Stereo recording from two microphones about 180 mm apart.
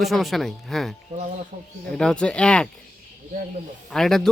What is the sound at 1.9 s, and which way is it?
Speech, 5° left (ahead or behind).